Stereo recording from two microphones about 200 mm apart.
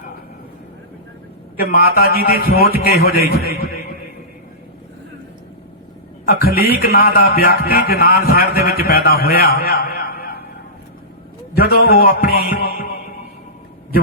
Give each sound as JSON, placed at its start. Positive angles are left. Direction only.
{"t": 1.5, "sound": "a man's voice", "side_deg": 45}
{"t": 6.2, "sound": "a man's voice", "side_deg": 45}
{"t": 11.5, "sound": "a man's voice", "side_deg": 50}